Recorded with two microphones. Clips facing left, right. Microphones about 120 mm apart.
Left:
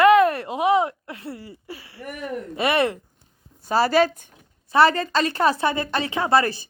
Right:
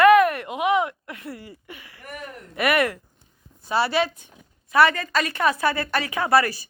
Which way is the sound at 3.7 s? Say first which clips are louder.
Left 4 dB; 40° left (ahead or behind).